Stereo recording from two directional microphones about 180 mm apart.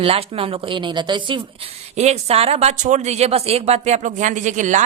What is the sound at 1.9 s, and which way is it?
A man's voice, 35° right (ahead or behind).